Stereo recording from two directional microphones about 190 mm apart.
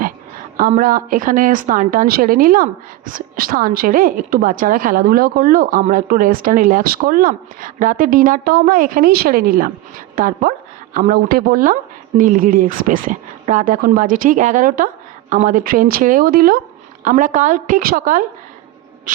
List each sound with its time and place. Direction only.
0.5 s a woman's voice: 50° right (ahead or behind)